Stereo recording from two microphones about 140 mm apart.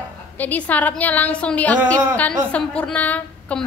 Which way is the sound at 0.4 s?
10° left (ahead or behind).